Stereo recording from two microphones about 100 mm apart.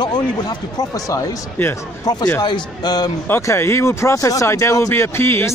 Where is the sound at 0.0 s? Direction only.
45° left (ahead or behind).